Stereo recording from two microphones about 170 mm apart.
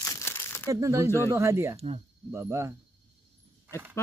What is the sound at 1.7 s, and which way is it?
Speech, 35° right (ahead or behind).